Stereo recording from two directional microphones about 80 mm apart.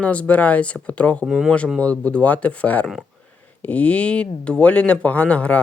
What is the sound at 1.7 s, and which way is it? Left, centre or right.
Speech, centre.